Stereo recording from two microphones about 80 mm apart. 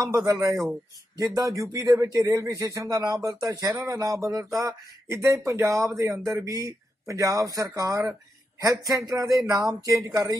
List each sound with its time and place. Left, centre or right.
0.1 s speech: right